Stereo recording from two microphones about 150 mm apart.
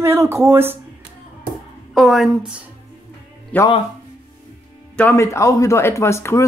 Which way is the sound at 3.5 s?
10° left (ahead or behind).